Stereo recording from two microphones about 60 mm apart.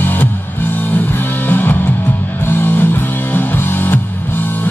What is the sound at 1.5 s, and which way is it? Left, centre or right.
Music, left.